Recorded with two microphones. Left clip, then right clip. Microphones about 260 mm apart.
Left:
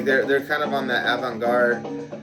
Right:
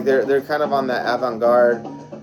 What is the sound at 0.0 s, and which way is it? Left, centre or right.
Speech, centre.